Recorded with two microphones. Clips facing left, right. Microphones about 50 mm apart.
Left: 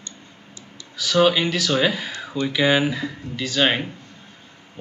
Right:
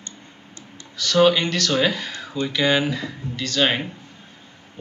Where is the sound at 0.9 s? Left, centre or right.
Centre.